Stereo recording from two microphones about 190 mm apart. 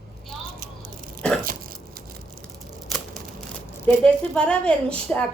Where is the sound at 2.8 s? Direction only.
Centre (ahead or behind).